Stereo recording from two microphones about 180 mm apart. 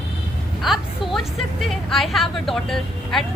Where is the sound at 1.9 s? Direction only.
Centre (ahead or behind).